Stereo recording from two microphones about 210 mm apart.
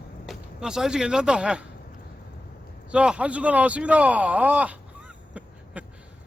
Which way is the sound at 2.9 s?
5° right (ahead or behind).